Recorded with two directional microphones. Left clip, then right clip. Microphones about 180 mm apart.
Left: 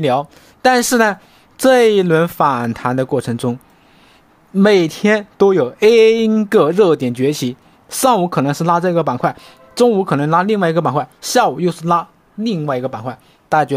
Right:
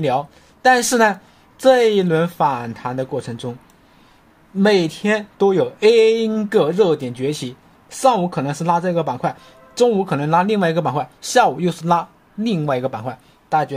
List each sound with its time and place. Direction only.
0.0 s speech: 30° left (ahead or behind)
4.6 s speech: 40° left (ahead or behind); by 13.2 s 15° left (ahead or behind)
13.5 s a man's voice: 40° left (ahead or behind)